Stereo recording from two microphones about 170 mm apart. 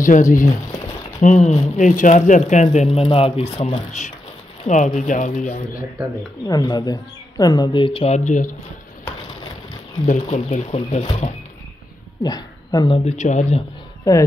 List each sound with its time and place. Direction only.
0.0 s speech: 50° left (ahead or behind); by 3.8 s 30° left (ahead or behind)
4.6 s speech: 45° left (ahead or behind)
6.4 s speech: 20° left (ahead or behind); by 8.5 s 45° left (ahead or behind)
10.2 s speech: 45° left (ahead or behind)
12.2 s speech: 25° left (ahead or behind); by 13.7 s 45° left (ahead or behind)
14.1 s speech: 20° left (ahead or behind)